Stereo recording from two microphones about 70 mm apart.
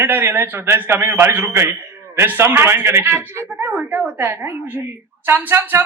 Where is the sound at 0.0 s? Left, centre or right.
Right.